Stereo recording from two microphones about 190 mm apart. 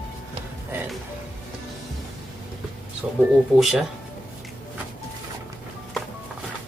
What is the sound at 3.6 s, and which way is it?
Speech, 5° right (ahead or behind).